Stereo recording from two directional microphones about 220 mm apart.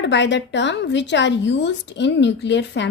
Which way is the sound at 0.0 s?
55° left (ahead or behind).